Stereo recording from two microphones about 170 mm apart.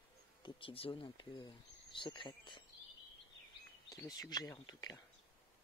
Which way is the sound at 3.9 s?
20° left (ahead or behind).